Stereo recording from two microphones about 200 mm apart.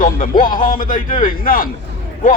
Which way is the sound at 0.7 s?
45° left (ahead or behind).